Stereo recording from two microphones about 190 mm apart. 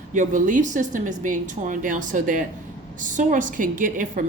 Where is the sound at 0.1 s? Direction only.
45° right (ahead or behind).